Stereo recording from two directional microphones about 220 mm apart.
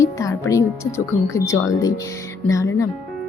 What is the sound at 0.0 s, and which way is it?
Speech, 15° left (ahead or behind).